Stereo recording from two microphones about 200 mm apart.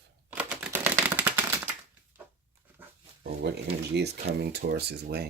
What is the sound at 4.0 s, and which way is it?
Speech, 55° right (ahead or behind).